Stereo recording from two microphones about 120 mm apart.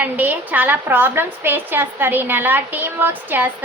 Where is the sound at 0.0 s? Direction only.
15° right (ahead or behind).